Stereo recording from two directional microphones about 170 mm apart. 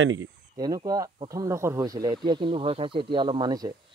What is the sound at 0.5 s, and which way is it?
Speech, 25° right (ahead or behind).